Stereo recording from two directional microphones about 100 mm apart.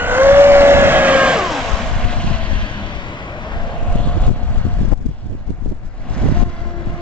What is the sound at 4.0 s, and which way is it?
Vehicle, 10° left (ahead or behind).